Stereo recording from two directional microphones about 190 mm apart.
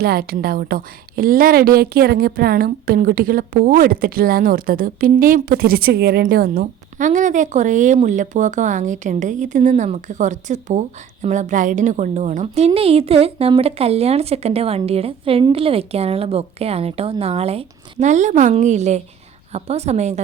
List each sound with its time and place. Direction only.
0.0 s a woman's voice: 55° right (ahead or behind); by 20.1 s 35° right (ahead or behind)